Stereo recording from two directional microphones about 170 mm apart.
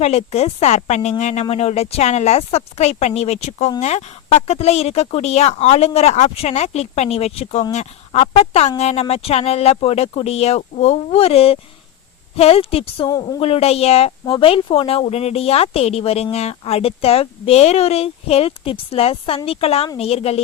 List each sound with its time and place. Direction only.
0.0 s speech: 40° left (ahead or behind)
13.1 s speech: 20° left (ahead or behind)
13.4 s speech: 35° left (ahead or behind)